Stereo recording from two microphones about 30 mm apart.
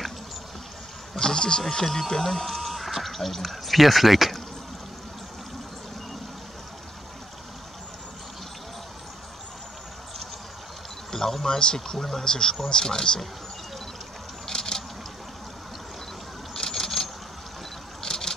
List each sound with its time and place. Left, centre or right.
1.1 s speech: left; by 4.4 s centre
11.1 s a sound: centre
11.4 s speech: centre
12.3 s speech: left
14.5 s vehicle: centre
16.5 s vehicle: centre